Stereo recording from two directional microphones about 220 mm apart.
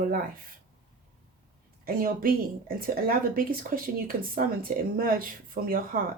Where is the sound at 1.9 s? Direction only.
40° right (ahead or behind).